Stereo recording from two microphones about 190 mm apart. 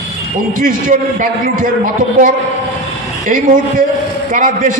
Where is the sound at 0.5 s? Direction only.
45° right (ahead or behind).